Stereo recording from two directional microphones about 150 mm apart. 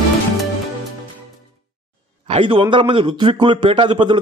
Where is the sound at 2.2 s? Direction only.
35° right (ahead or behind).